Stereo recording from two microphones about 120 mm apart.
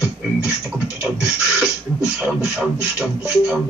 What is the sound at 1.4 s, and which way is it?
Beatboxing, 5° right (ahead or behind).